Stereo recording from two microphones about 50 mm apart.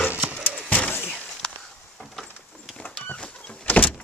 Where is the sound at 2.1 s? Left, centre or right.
Centre.